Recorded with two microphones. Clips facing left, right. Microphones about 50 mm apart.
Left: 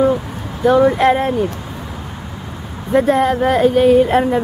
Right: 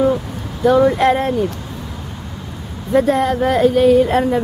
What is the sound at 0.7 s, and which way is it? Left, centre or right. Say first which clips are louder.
Speech: left 1 dB; centre.